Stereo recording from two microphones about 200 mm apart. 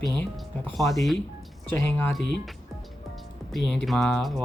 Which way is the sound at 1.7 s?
10° left (ahead or behind).